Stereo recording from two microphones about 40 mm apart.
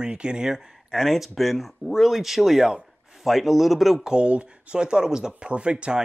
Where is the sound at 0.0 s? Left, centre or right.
Right.